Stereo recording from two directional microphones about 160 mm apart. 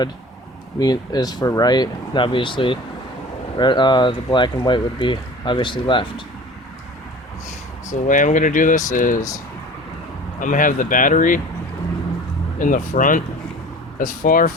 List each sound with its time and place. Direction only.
0.8 s speech: 25° left (ahead or behind)
7.9 s speech: 55° left (ahead or behind)
10.4 s speech: 55° left (ahead or behind)
12.5 s speech: 55° left (ahead or behind)